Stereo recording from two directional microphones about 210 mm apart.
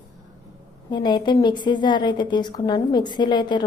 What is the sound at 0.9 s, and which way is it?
A woman's voice, 20° left (ahead or behind).